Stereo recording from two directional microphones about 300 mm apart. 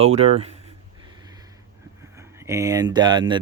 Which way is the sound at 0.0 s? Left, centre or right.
Right.